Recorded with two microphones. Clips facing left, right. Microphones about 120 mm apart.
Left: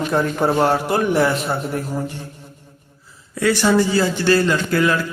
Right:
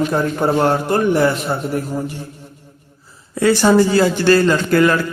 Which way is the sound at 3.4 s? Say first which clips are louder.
Right 4 dB; 30° right (ahead or behind).